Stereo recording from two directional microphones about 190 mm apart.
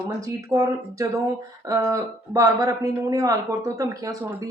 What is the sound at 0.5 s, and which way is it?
A woman's voice, 20° right (ahead or behind).